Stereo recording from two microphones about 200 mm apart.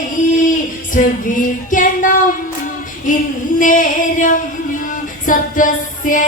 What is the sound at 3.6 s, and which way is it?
Music, 40° left (ahead or behind).